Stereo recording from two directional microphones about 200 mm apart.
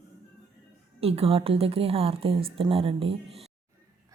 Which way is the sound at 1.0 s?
30° right (ahead or behind).